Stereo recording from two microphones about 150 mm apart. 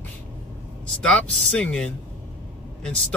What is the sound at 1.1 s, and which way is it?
Speech, 5° left (ahead or behind).